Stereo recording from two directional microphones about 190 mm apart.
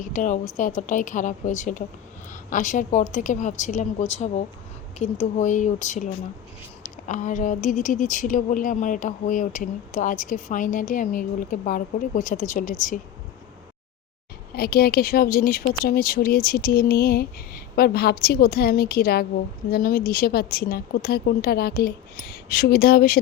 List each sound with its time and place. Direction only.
0.0 s a woman's voice: 40° left (ahead or behind)
14.5 s a woman's voice: 55° left (ahead or behind)